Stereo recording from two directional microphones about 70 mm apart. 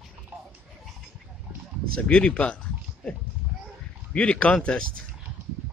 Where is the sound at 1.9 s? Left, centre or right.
Centre.